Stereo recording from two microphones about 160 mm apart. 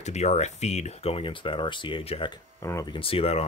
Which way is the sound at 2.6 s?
20° left (ahead or behind).